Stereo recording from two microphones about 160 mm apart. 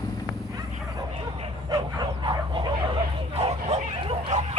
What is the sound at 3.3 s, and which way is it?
Bow-wow, 40° right (ahead or behind).